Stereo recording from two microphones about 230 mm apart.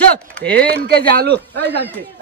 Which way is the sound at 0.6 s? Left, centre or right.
Right.